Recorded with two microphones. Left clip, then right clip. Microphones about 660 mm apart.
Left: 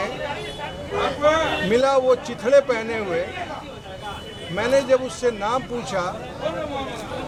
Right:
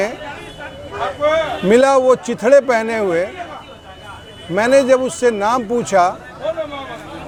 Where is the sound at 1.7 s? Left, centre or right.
Right.